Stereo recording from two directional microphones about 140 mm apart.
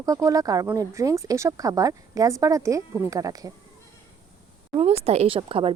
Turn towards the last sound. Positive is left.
turn(degrees=-40)  # may be behind; listen again after turning